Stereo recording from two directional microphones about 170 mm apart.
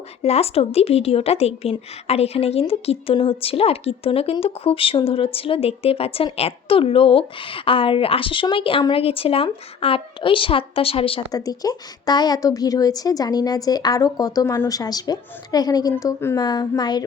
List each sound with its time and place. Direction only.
0.2 s a woman's voice: 35° left (ahead or behind)
11.3 s a woman's voice: 20° left (ahead or behind)